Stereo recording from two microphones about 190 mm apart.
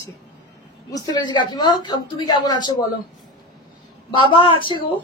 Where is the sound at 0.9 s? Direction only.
25° left (ahead or behind).